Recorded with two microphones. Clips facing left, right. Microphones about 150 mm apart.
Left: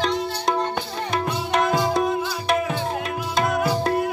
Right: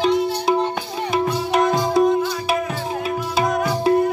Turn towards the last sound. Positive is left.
turn(degrees=5)  # may be behind; listen again after turning